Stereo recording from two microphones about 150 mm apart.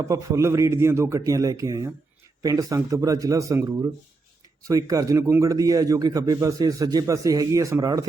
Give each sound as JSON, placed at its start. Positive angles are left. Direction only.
{"t": 0.0, "sound": "a man's voice", "side_deg": -20}